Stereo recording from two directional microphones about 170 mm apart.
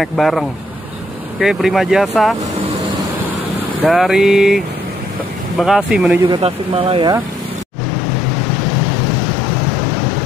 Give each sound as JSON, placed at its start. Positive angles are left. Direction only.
{"t": 0.0, "sound": "speech", "side_deg": 0}
{"t": 3.8, "sound": "speech", "side_deg": 0}
{"t": 6.4, "sound": "speech", "side_deg": -35}